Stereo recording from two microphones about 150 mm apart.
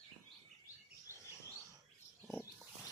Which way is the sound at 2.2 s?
Centre (ahead or behind).